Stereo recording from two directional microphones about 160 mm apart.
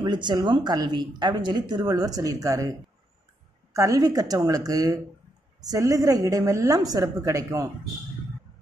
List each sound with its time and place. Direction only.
0.0 s speech: 30° right (ahead or behind)
3.7 s speech: 20° right (ahead or behind)